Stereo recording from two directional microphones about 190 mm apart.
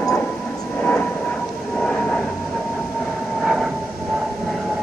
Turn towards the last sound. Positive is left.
turn(degrees=0)  # may be behind; listen again after turning